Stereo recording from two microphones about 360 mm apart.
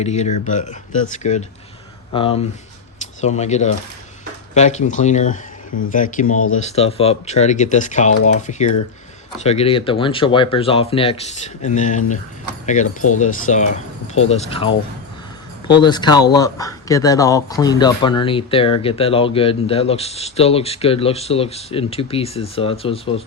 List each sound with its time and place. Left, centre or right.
0.0 s speech: centre
6.3 s speech: left
6.6 s speech: centre